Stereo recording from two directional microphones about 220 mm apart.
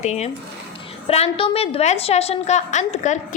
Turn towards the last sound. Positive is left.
turn(degrees=30)  # may be behind; listen again after turning